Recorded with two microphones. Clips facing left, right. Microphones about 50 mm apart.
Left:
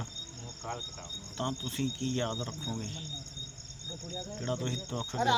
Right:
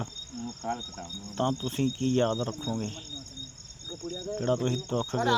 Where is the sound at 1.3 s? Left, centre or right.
Right.